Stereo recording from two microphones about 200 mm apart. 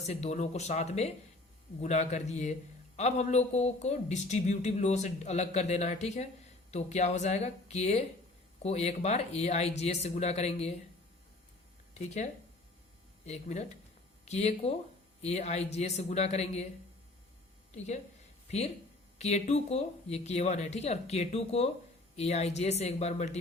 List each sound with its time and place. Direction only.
0.0 s a man's voice: 30° left (ahead or behind)
11.9 s a man's voice: 35° left (ahead or behind)
19.2 s a man's voice: 35° left (ahead or behind)